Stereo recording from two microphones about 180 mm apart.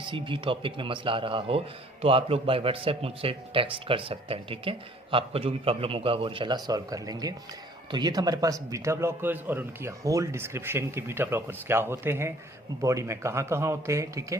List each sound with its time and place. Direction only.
0.0 s a man's voice: 25° right (ahead or behind)